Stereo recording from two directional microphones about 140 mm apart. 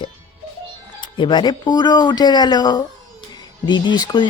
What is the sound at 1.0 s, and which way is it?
Speech, 35° left (ahead or behind).